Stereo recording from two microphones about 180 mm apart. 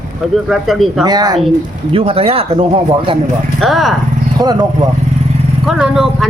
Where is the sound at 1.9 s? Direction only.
35° right (ahead or behind).